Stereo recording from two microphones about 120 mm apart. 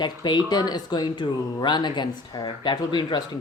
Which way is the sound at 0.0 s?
35° left (ahead or behind).